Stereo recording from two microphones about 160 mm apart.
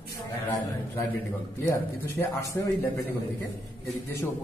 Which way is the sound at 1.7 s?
20° left (ahead or behind).